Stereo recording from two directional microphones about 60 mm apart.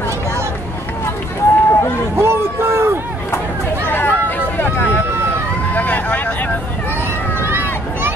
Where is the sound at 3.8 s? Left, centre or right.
Left.